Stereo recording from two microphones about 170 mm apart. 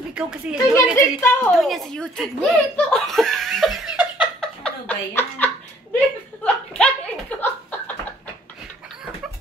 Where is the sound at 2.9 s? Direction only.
Centre (ahead or behind).